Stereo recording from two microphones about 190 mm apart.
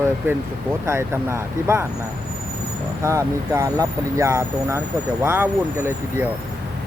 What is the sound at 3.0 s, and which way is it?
Speech, 15° right (ahead or behind).